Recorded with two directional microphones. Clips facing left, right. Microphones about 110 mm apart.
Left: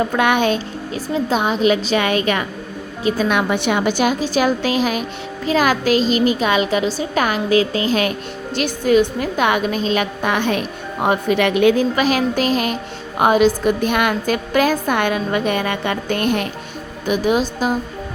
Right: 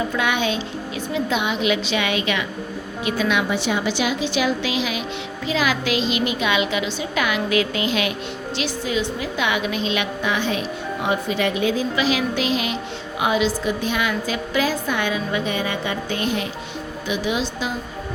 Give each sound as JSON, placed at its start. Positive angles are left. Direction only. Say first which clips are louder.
{"t": 0.0, "sound": "a woman's voice", "louder": "left 6 dB", "side_deg": 55}